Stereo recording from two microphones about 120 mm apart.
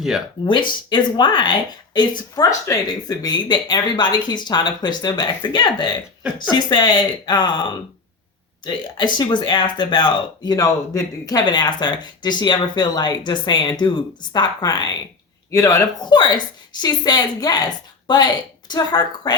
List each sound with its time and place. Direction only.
0.4 s speech: 40° left (ahead or behind)
18.7 s speech: 35° left (ahead or behind)